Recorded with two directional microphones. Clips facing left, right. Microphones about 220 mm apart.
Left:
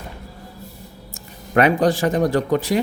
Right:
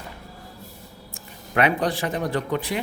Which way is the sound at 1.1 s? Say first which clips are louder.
Left 6 dB; 45° left (ahead or behind).